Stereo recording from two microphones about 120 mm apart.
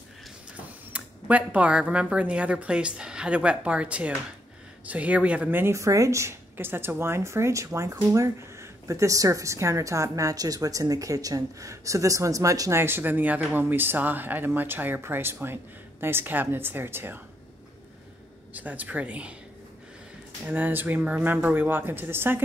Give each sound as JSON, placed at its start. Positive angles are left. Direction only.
{"t": 0.9, "sound": "speech", "side_deg": -10}
{"t": 18.5, "sound": "speech", "side_deg": -15}
{"t": 20.4, "sound": "speech", "side_deg": -15}